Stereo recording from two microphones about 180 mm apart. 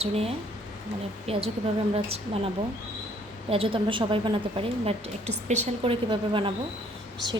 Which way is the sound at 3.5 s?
30° right (ahead or behind).